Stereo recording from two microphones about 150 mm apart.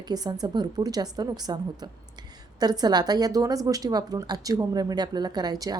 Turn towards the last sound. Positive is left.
turn(degrees=-25)  # may be behind; listen again after turning